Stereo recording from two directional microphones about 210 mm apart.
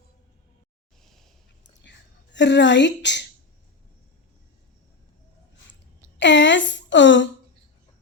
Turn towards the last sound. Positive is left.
turn(degrees=60)  # may be behind; listen again after turning